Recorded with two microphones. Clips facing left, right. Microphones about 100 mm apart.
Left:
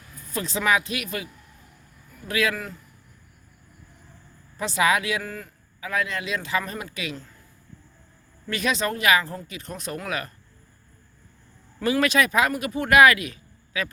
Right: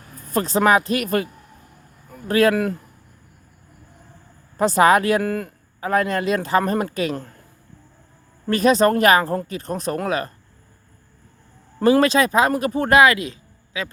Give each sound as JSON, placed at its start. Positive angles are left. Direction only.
{"t": 0.0, "sound": "a man's voice", "side_deg": -45}
{"t": 2.6, "sound": "speech", "side_deg": -60}
{"t": 4.5, "sound": "speech", "side_deg": -45}
{"t": 8.4, "sound": "speech", "side_deg": -40}
{"t": 11.8, "sound": "speech", "side_deg": -35}